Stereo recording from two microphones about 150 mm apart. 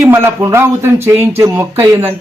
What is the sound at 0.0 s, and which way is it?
Speech, 15° right (ahead or behind).